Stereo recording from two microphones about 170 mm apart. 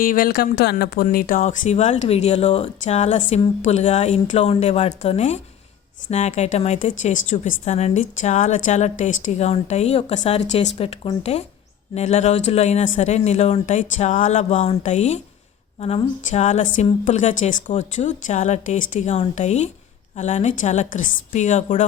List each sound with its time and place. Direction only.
0.0 s a woman's voice: 60° left (ahead or behind)